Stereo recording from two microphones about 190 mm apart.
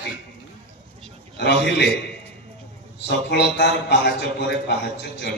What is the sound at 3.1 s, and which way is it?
A man's voice, 65° left (ahead or behind).